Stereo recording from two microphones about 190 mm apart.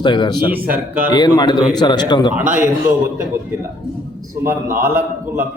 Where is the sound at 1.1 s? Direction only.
20° left (ahead or behind).